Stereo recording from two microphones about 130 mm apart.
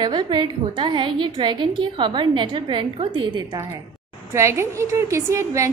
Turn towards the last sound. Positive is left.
turn(degrees=-25)  # may be behind; listen again after turning